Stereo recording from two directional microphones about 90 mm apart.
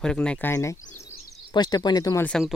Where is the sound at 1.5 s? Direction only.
50° left (ahead or behind).